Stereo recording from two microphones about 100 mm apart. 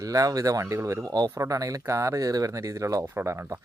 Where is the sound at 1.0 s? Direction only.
40° right (ahead or behind).